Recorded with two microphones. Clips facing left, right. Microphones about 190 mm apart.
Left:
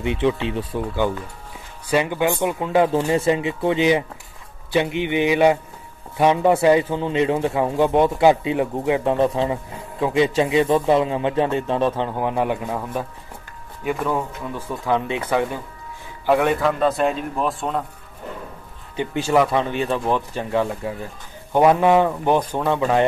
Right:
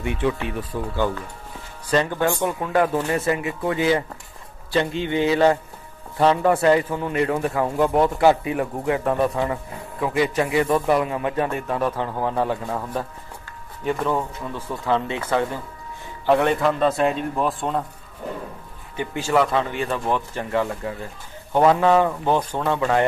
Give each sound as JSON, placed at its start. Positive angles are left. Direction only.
{"t": 0.0, "sound": "a man's voice", "side_deg": 20}
{"t": 13.8, "sound": "speech", "side_deg": 5}
{"t": 14.9, "sound": "speech", "side_deg": 15}
{"t": 16.3, "sound": "speech", "side_deg": 0}
{"t": 18.9, "sound": "a man's voice", "side_deg": 20}